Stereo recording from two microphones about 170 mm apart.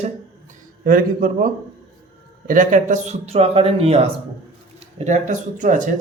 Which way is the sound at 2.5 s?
50° right (ahead or behind).